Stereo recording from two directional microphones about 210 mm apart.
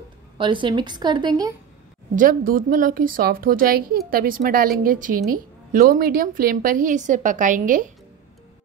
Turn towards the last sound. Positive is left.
turn(degrees=-40)  # may be behind; listen again after turning